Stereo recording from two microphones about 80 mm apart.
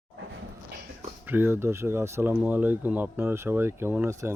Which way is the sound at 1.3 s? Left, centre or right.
Right.